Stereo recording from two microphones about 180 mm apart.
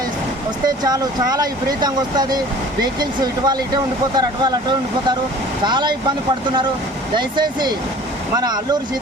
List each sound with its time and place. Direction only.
0.9 s speech: 20° right (ahead or behind)
5.6 s speech: 25° right (ahead or behind)
7.2 s speech: 25° right (ahead or behind)